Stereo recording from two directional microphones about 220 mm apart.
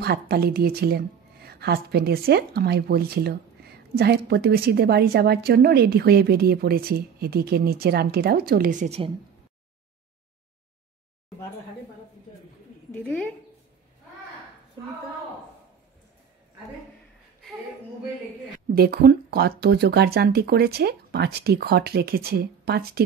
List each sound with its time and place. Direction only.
0.0 s a woman's voice: 45° right (ahead or behind); by 9.1 s 30° right (ahead or behind)
12.9 s speech: 5° left (ahead or behind)
18.7 s a woman's voice: 45° right (ahead or behind)